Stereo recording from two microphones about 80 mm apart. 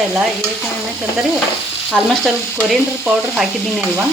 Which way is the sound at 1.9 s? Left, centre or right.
Centre.